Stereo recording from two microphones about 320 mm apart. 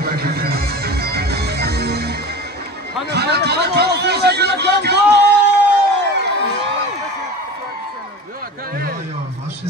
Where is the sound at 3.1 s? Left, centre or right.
Right.